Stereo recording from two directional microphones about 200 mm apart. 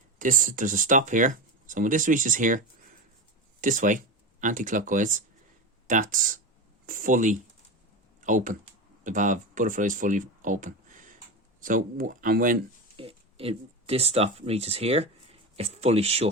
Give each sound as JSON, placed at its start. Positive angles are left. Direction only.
{"t": 0.2, "sound": "speech", "side_deg": -40}
{"t": 13.0, "sound": "speech", "side_deg": -30}